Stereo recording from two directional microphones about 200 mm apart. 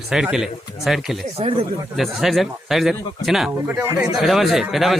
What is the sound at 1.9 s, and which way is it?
A man's voice, centre (ahead or behind).